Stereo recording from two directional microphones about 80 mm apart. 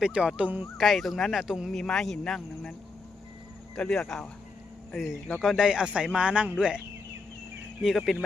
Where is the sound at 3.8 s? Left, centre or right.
Centre.